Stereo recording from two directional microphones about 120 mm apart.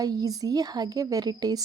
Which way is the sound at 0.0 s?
30° right (ahead or behind).